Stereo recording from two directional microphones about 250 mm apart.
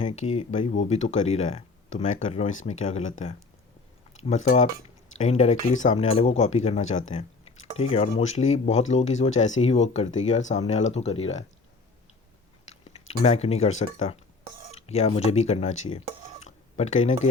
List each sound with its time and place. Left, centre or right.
0.0 s speech: left
12.6 s speech: left